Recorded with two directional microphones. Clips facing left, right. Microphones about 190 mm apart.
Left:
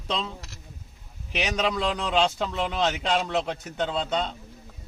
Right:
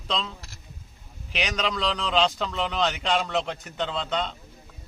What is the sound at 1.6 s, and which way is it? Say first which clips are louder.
A man's voice: left 1 dB; 10° left (ahead or behind).